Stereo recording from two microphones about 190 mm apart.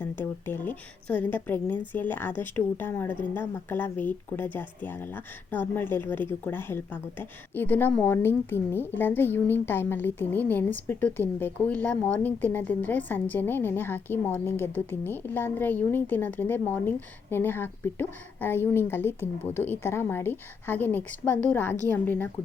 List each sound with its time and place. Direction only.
0.0 s a woman's voice: 10° left (ahead or behind)